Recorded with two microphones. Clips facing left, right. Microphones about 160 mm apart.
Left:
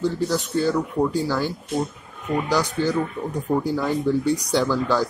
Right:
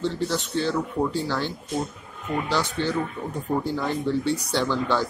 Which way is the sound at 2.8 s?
5° left (ahead or behind).